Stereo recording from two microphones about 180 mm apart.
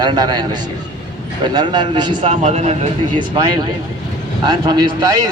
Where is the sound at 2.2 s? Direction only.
40° right (ahead or behind).